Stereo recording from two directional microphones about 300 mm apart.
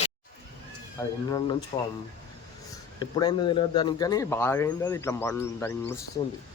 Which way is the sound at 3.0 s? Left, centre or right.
Centre.